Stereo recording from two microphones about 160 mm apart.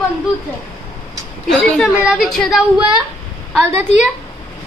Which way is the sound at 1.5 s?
5° left (ahead or behind).